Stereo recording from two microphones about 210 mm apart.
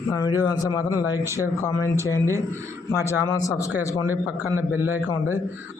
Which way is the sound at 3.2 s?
15° left (ahead or behind).